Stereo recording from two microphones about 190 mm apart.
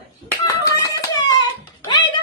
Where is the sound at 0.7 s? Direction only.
20° left (ahead or behind).